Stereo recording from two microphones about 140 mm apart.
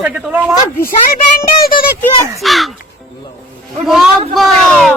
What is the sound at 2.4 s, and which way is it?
Speech, centre (ahead or behind).